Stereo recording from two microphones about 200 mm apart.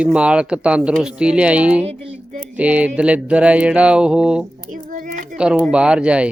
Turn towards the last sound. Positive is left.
turn(degrees=-5)  # may be behind; listen again after turning